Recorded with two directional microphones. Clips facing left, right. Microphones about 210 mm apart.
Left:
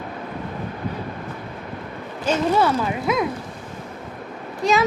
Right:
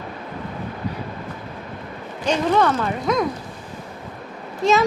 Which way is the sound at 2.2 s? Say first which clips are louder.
Right 1 dB; 5° left (ahead or behind).